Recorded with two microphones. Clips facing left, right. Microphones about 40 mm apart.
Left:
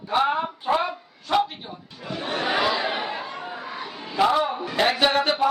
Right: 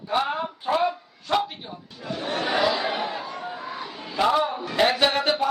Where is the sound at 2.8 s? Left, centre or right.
Left.